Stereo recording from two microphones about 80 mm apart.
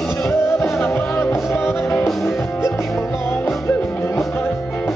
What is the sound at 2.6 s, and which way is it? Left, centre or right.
Music, left.